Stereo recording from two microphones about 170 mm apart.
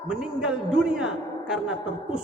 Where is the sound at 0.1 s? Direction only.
5° right (ahead or behind).